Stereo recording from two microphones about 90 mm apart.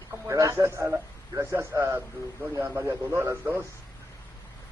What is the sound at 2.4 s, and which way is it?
Speech, 15° right (ahead or behind).